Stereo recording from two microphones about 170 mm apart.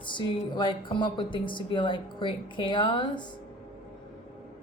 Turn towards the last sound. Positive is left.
turn(degrees=25)  # may be behind; listen again after turning